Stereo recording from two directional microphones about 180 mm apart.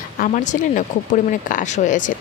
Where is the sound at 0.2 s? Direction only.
45° left (ahead or behind).